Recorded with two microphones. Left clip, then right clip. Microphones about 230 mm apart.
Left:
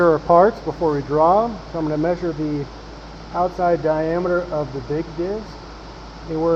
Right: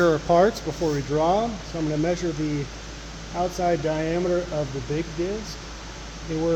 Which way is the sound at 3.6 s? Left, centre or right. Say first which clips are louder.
Left 5 dB; right.